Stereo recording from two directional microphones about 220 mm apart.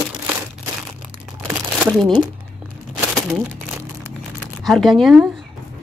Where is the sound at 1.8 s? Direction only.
5° left (ahead or behind).